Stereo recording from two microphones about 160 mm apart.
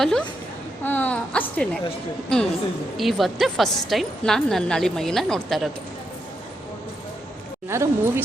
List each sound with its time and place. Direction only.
0.0 s a woman's voice: 5° left (ahead or behind)
3.0 s a woman's voice: centre (ahead or behind)
7.7 s a woman's voice: 15° right (ahead or behind)